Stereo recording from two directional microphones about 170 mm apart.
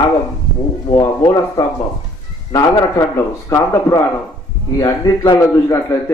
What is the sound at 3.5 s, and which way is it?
A man's voice, 20° left (ahead or behind).